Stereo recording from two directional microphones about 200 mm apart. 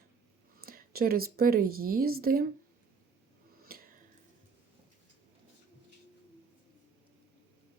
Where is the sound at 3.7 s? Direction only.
50° right (ahead or behind).